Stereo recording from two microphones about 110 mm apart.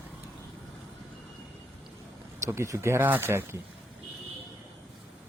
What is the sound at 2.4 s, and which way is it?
Speech, 25° right (ahead or behind).